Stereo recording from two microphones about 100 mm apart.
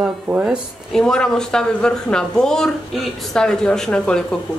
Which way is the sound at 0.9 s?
5° left (ahead or behind).